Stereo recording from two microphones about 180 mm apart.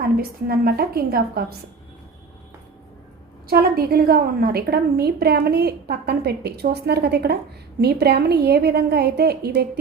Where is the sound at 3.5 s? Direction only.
60° right (ahead or behind).